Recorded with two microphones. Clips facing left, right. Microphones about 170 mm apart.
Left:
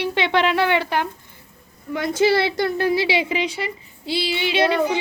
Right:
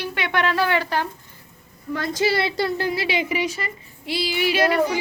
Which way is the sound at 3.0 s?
90° left.